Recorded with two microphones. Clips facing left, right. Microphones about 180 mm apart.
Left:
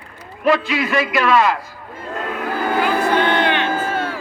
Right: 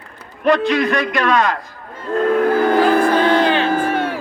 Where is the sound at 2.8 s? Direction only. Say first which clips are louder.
Right 4 dB; 35° right (ahead or behind).